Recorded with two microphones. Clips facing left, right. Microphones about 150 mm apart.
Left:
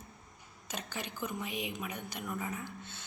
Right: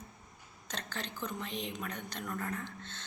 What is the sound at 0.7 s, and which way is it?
A woman's voice, 10° left (ahead or behind).